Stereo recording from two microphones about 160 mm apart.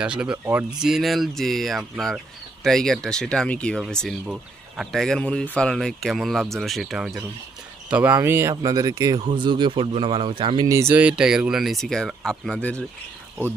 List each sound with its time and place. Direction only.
0.0 s speech: 5° right (ahead or behind)